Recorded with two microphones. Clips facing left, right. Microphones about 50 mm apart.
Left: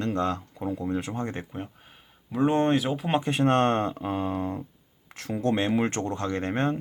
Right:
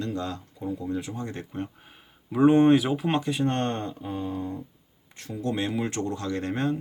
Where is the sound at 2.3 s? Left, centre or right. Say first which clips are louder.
Right 5 dB; centre.